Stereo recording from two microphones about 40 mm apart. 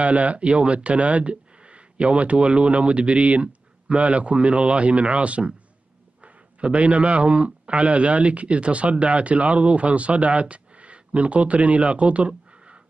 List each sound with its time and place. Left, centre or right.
0.0 s a man's voice: right